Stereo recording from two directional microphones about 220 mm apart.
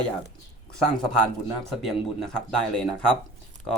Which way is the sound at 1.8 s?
Centre (ahead or behind).